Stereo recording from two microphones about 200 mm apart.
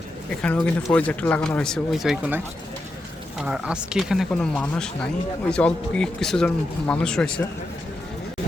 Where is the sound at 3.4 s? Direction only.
5° right (ahead or behind).